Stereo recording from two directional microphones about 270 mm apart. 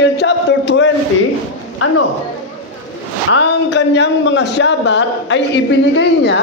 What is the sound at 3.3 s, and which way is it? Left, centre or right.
A man's voice, left.